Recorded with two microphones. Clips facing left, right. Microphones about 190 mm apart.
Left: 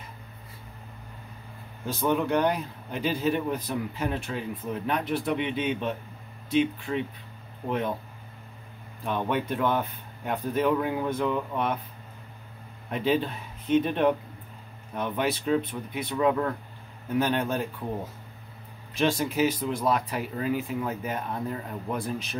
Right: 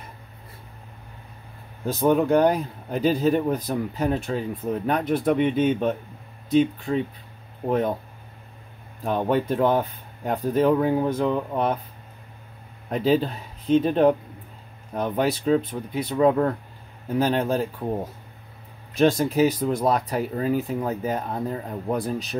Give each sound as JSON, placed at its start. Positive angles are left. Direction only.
{"t": 1.9, "sound": "speech", "side_deg": -40}
{"t": 9.0, "sound": "speech", "side_deg": -40}
{"t": 12.9, "sound": "speech", "side_deg": -35}
{"t": 18.9, "sound": "speech", "side_deg": -40}